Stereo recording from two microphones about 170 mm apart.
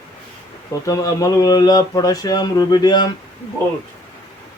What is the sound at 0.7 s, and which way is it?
Speech, 20° left (ahead or behind).